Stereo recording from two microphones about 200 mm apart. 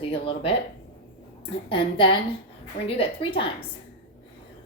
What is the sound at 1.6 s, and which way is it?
A woman's voice, 25° left (ahead or behind).